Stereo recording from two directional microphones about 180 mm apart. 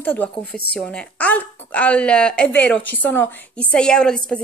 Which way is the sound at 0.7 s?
5° left (ahead or behind).